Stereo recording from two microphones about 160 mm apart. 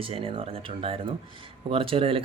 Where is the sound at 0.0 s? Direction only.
35° right (ahead or behind).